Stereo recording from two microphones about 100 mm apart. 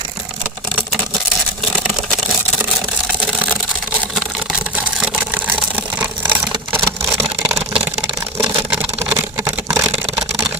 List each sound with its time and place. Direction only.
4.9 s vehicle: 10° right (ahead or behind)
9.0 s camera: 25° right (ahead or behind)